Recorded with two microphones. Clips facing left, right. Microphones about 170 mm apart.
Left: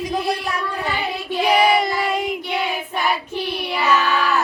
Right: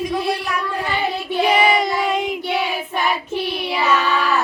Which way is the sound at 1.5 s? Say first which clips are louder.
Left 1 dB; centre (ahead or behind).